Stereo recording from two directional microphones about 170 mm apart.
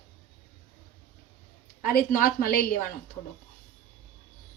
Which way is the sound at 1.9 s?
60° left (ahead or behind).